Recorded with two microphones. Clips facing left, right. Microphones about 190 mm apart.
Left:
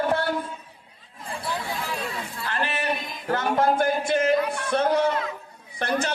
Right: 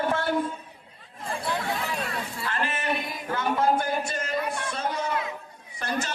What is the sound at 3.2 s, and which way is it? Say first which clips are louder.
Music: left 5 dB; 45° left (ahead or behind).